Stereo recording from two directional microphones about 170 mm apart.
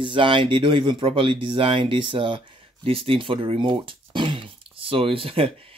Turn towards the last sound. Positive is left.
turn(degrees=-35)  # may be behind; listen again after turning